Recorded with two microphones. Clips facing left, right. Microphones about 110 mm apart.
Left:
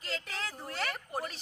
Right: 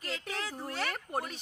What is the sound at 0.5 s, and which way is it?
Speech, 5° right (ahead or behind).